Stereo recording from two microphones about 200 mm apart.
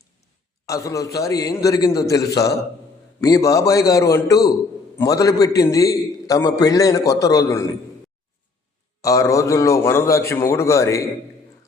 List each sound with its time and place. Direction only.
0.6 s a man's voice: 15° left (ahead or behind)
9.0 s a man's voice: 15° left (ahead or behind)